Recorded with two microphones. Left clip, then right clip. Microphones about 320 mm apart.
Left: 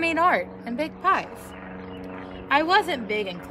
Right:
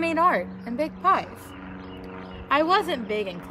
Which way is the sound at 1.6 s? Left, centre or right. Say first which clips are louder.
Left 2 dB; centre.